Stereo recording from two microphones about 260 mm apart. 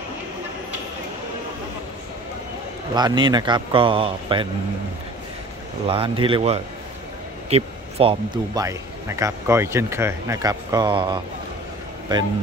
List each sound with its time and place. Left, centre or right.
2.9 s a man's voice: centre
5.9 s a man's voice: centre